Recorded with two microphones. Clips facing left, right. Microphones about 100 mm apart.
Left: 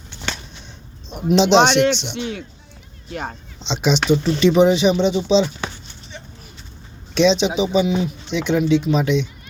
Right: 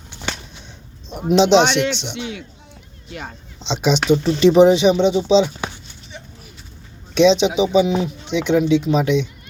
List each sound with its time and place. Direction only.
1.4 s speech: 10° right (ahead or behind)
1.6 s a man's voice: 55° left (ahead or behind)
3.6 s speech: 10° right (ahead or behind)
4.2 s speech: 30° right (ahead or behind)
4.8 s a sound: 15° right (ahead or behind)
7.1 s speech: 15° right (ahead or behind)